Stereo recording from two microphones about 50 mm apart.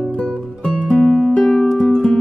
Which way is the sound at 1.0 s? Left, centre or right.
Centre.